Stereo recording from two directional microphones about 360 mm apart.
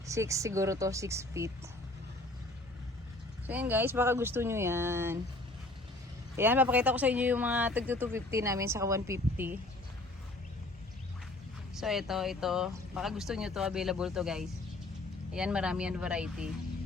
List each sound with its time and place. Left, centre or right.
0.1 s speech: centre
3.4 s speech: centre
6.3 s speech: centre
11.7 s speech: centre